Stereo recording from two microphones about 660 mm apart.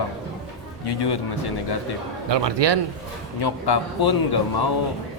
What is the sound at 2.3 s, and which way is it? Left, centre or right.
Speech, right.